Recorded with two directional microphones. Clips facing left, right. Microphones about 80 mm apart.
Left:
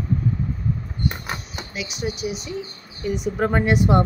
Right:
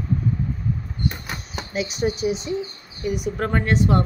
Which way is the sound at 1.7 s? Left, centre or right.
Right.